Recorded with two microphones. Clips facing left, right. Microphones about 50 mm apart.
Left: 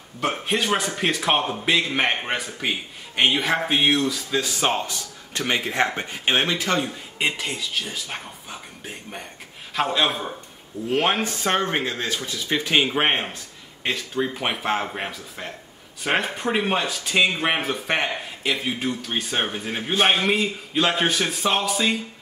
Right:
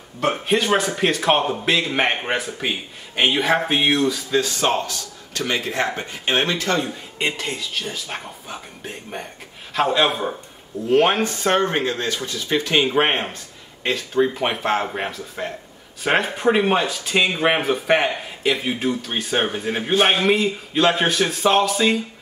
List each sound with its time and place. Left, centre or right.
0.2 s speech: centre
4.4 s speech: centre
6.9 s speech: centre
11.7 s speech: centre